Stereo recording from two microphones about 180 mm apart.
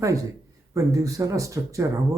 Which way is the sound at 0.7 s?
20° right (ahead or behind).